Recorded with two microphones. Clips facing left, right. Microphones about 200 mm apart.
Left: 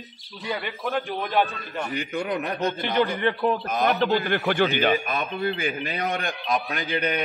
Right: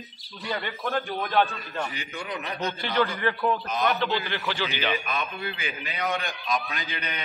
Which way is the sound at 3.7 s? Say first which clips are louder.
Left 4 dB; 45° left (ahead or behind).